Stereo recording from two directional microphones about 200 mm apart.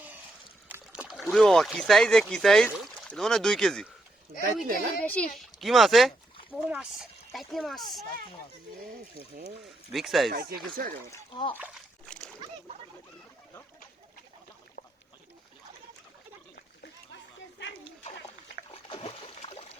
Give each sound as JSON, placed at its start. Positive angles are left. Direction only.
{"t": 0.7, "sound": "speech", "side_deg": -5}
{"t": 4.6, "sound": "speech", "side_deg": -50}
{"t": 4.9, "sound": "speech", "side_deg": 5}
{"t": 9.9, "sound": "speech", "side_deg": 0}
{"t": 11.1, "sound": "speech", "side_deg": 25}
{"t": 11.5, "sound": "splash", "side_deg": -5}
{"t": 18.7, "sound": "splash", "side_deg": 25}